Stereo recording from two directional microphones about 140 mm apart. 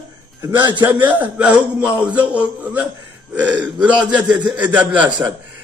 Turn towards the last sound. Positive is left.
turn(degrees=-10)  # may be behind; listen again after turning